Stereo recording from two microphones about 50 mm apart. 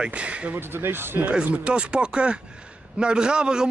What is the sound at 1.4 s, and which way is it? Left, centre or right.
A man's voice, right.